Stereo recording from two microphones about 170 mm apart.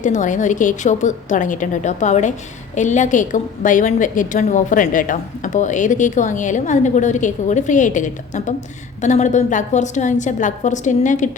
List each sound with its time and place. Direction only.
0.0 s a woman's voice: 45° left (ahead or behind)